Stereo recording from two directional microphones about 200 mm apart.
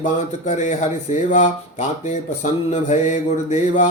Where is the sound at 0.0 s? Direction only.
35° left (ahead or behind).